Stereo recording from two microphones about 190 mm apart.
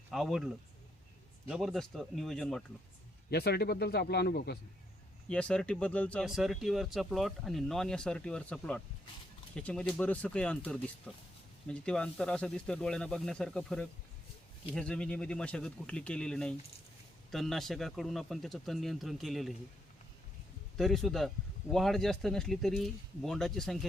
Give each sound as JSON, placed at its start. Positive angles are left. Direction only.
{"t": 0.1, "sound": "speech", "side_deg": 0}
{"t": 3.2, "sound": "speech", "side_deg": 55}
{"t": 5.3, "sound": "speech", "side_deg": 5}
{"t": 20.7, "sound": "speech", "side_deg": 0}